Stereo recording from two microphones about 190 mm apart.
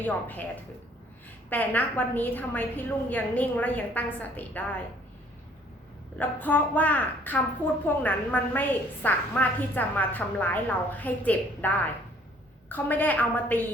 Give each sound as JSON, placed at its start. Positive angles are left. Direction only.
{"t": 0.0, "sound": "a woman's voice", "side_deg": 10}
{"t": 1.5, "sound": "a woman's voice", "side_deg": 10}
{"t": 6.1, "sound": "a woman's voice", "side_deg": 10}